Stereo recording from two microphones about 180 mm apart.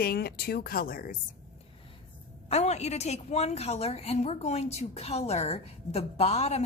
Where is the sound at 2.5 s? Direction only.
35° left (ahead or behind).